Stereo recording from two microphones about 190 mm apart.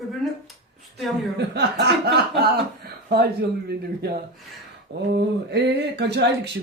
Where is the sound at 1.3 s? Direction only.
60° right (ahead or behind).